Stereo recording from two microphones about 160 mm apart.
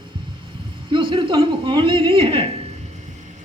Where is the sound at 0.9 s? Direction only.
30° right (ahead or behind).